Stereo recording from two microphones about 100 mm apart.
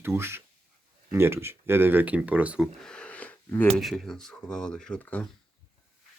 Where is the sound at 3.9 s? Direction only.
5° left (ahead or behind).